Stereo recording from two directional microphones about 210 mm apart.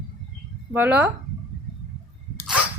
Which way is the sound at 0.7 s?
10° right (ahead or behind).